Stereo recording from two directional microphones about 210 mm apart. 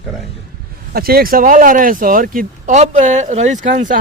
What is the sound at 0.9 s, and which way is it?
Speech, 45° right (ahead or behind).